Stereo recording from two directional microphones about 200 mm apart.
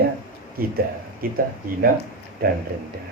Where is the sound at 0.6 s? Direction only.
50° right (ahead or behind).